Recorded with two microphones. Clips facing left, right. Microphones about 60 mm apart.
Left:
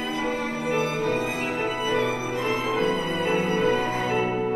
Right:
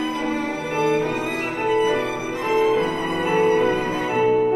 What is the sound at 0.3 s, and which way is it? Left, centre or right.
Music, right.